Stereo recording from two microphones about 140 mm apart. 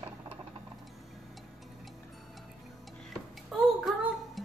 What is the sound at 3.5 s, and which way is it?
Music, centre (ahead or behind).